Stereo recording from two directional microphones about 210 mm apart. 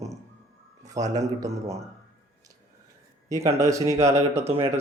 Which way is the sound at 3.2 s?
15° right (ahead or behind).